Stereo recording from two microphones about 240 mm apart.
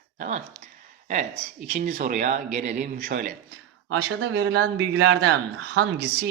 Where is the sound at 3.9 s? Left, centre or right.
Right.